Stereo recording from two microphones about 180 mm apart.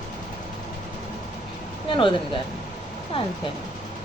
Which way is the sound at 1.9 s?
30° left (ahead or behind).